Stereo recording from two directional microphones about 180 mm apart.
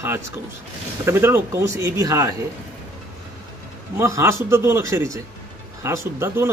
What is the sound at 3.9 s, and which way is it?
Speech, 15° right (ahead or behind).